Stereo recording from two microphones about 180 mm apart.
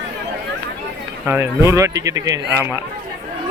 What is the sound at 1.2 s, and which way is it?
Speech, 10° right (ahead or behind).